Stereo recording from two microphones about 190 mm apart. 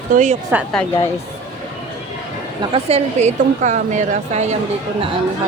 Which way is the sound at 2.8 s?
35° right (ahead or behind).